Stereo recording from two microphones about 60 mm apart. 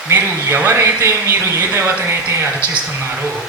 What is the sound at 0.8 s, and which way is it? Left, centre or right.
Speech, right.